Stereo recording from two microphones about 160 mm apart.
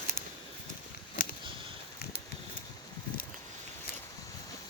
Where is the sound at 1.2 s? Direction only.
60° left (ahead or behind).